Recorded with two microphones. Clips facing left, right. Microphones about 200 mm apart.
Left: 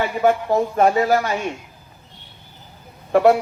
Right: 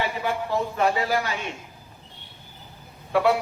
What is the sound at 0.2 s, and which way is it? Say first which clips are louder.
Speech: left 8 dB; 50° left (ahead or behind).